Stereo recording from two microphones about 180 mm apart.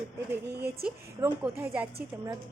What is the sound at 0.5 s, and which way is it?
Speech, 65° right (ahead or behind).